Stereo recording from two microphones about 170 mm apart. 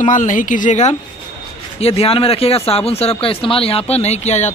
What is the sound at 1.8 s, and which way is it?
Speech, 35° left (ahead or behind).